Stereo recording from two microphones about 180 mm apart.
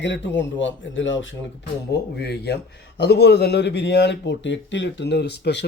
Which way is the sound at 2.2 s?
65° left (ahead or behind).